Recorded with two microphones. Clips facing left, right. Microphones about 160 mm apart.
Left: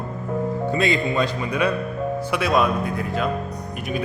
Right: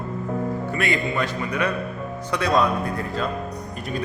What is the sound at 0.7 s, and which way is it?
Speech, 20° left (ahead or behind).